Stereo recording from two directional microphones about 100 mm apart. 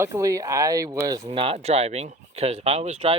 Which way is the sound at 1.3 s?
70° right (ahead or behind).